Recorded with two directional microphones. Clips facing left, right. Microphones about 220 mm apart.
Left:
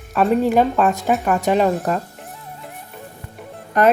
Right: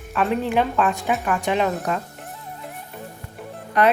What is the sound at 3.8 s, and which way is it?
Speech, 45° left (ahead or behind).